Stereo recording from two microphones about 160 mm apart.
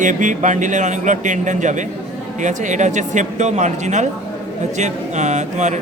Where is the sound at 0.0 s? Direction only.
55° right (ahead or behind).